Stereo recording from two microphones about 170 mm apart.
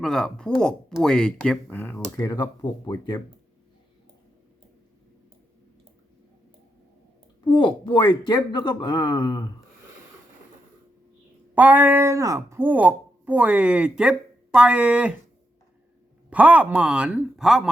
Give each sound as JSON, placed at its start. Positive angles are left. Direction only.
{"t": 0.0, "sound": "speech", "side_deg": 5}
{"t": 7.4, "sound": "speech", "side_deg": 30}
{"t": 11.5, "sound": "speech", "side_deg": -10}
{"t": 16.3, "sound": "speech", "side_deg": -10}